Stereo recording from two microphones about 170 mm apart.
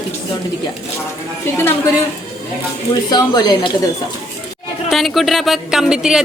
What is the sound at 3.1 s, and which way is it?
Speech, 25° left (ahead or behind).